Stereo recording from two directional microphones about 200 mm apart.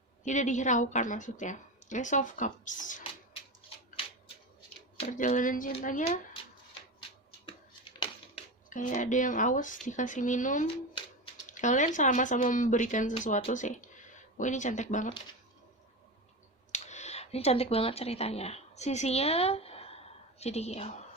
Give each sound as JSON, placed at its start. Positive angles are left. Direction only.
{"t": 0.3, "sound": "a woman's voice", "side_deg": 35}
{"t": 4.9, "sound": "a woman's voice", "side_deg": 40}
{"t": 7.9, "sound": "a sound", "side_deg": 25}
{"t": 8.7, "sound": "a woman's voice", "side_deg": 40}
{"t": 16.7, "sound": "a woman's voice", "side_deg": 35}